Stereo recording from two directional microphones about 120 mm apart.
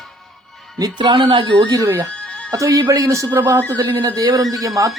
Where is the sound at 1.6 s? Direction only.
30° right (ahead or behind).